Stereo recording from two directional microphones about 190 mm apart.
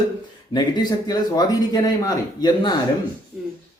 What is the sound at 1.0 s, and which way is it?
Speech, 20° left (ahead or behind).